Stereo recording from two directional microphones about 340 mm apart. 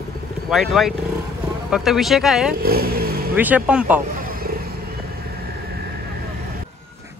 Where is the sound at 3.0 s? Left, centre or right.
Right.